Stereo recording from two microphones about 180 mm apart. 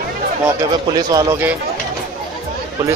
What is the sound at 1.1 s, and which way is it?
Speech, 20° right (ahead or behind).